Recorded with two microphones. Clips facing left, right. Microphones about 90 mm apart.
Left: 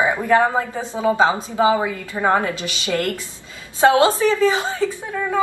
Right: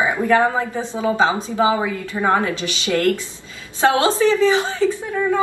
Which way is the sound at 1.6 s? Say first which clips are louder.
Left 1 dB; 20° left (ahead or behind).